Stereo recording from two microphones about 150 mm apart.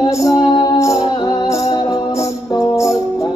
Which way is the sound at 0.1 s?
20° left (ahead or behind).